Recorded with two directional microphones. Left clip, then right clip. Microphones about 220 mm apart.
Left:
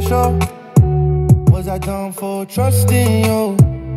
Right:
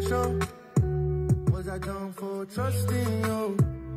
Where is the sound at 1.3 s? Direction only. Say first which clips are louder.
Left 13 dB; 25° left (ahead or behind).